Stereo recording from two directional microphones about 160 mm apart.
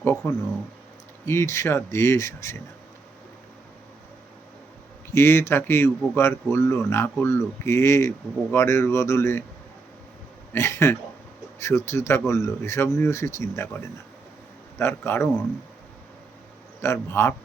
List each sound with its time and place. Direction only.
0.2 s speech: 15° left (ahead or behind)
5.1 s speech: 15° left (ahead or behind)
10.5 s speech: 15° left (ahead or behind)
14.8 s speech: 15° left (ahead or behind)
16.8 s speech: 15° left (ahead or behind)